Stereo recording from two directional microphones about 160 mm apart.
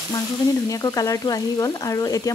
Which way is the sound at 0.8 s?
20° left (ahead or behind).